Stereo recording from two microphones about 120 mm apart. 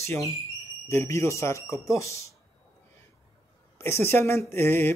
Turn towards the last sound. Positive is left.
turn(degrees=20)  # may be behind; listen again after turning